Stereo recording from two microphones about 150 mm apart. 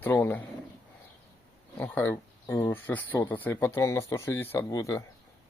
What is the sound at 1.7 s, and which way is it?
Speech, 15° left (ahead or behind).